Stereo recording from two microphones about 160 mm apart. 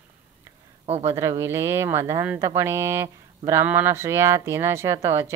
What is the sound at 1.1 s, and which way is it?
Speech, 15° right (ahead or behind).